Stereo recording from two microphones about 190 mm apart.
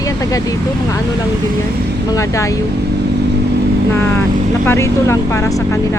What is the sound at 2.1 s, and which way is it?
Speech, 15° left (ahead or behind).